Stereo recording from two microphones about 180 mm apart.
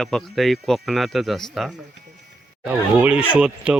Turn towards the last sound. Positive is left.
turn(degrees=-5)  # may be behind; listen again after turning